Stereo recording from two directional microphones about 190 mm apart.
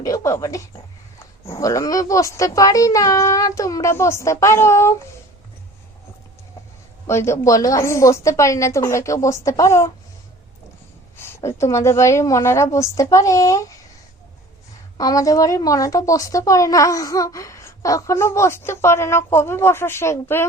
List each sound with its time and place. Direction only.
0.0 s speech: 15° left (ahead or behind)
7.1 s speech: 15° left (ahead or behind)
11.2 s speech: 15° left (ahead or behind)
14.9 s speech: 20° left (ahead or behind)